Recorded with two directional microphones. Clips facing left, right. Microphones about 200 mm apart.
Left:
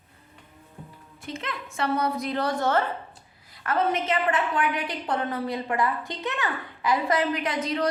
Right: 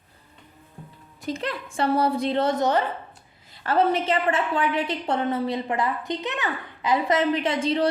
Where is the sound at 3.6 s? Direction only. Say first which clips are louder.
Right 4 dB; 30° right (ahead or behind).